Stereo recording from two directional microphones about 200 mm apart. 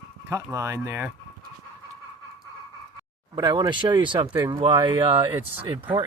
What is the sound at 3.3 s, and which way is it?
Speech, 20° right (ahead or behind).